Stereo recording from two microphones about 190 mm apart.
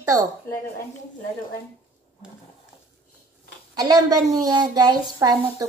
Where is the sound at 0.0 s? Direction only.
15° right (ahead or behind).